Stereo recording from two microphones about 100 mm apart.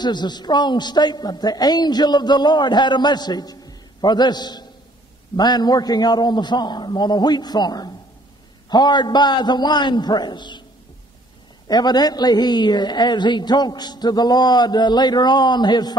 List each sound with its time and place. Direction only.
0.0 s a woman's voice: 45° left (ahead or behind)
11.6 s a woman's voice: 45° left (ahead or behind)